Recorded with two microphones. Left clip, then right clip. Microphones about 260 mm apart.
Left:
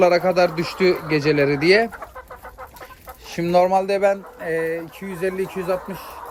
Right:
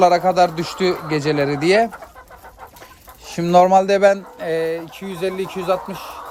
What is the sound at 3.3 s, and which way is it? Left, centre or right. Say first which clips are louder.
Speech: right 4 dB; right.